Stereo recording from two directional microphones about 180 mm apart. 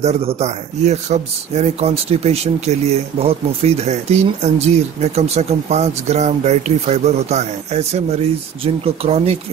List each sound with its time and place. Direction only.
0.0 s speech: 35° right (ahead or behind)